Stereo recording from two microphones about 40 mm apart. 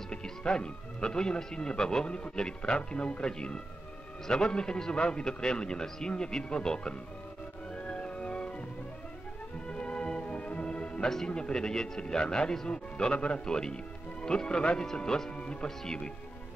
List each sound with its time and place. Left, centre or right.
0.1 s speech: left
7.7 s music: left
9.7 s music: left
11.2 s speech: left